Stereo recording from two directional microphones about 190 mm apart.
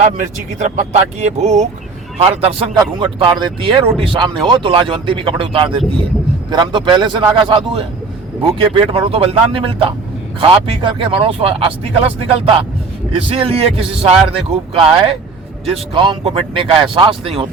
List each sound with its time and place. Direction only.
0.0 s speech: 40° right (ahead or behind)